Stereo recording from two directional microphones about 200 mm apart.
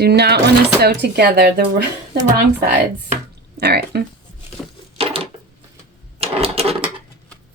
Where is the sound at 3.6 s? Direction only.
55° right (ahead or behind).